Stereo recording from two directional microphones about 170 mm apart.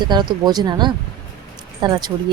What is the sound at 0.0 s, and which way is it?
Speech, 25° right (ahead or behind).